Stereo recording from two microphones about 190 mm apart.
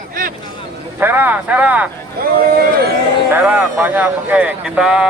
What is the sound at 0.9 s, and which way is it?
Speech, 10° right (ahead or behind).